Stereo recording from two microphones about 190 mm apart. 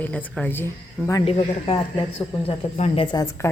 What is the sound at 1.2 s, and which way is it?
Speech, 30° left (ahead or behind).